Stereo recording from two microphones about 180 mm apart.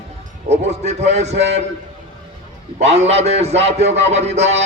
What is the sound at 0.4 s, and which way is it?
Speech, 35° right (ahead or behind).